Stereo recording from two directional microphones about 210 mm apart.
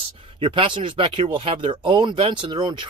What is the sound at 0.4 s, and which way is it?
Speech, 25° right (ahead or behind).